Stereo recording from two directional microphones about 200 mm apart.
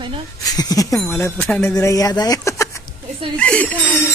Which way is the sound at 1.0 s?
5° left (ahead or behind).